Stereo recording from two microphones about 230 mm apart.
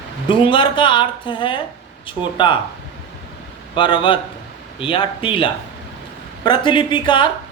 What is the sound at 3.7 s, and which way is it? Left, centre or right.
Speech, left.